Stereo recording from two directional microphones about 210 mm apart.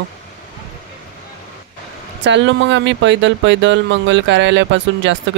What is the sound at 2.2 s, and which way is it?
Speech, 60° right (ahead or behind).